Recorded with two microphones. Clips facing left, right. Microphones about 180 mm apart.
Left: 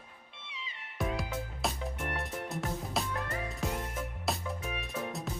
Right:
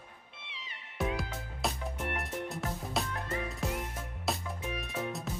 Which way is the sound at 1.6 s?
Centre (ahead or behind).